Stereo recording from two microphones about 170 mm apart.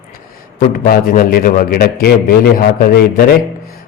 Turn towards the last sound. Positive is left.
turn(degrees=60)  # may be behind; listen again after turning